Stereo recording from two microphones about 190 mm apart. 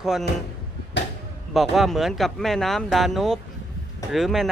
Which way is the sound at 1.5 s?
Centre (ahead or behind).